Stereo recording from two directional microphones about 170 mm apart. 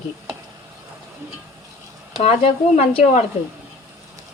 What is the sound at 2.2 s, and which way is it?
Speech, 40° left (ahead or behind).